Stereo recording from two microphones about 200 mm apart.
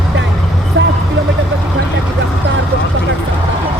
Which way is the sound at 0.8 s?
70° right (ahead or behind).